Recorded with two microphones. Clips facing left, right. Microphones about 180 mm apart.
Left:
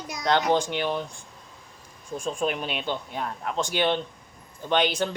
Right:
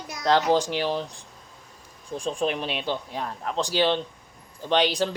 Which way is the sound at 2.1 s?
35° right (ahead or behind).